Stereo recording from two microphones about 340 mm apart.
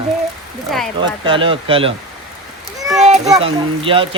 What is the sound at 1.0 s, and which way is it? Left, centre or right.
Speech, centre.